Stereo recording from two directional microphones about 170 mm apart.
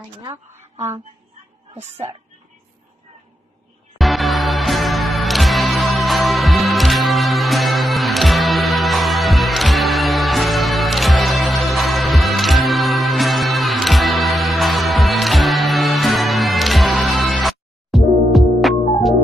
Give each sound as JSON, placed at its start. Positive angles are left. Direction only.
{"t": 0.2, "sound": "a woman's voice", "side_deg": -15}
{"t": 4.0, "sound": "music", "side_deg": 0}